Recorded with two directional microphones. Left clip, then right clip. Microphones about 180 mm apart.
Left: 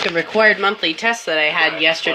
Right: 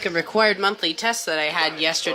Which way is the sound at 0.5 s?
20° right (ahead or behind).